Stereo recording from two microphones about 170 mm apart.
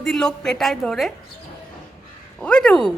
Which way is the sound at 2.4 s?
5° left (ahead or behind).